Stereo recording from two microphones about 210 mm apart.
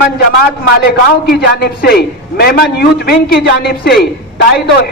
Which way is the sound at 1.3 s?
50° left (ahead or behind).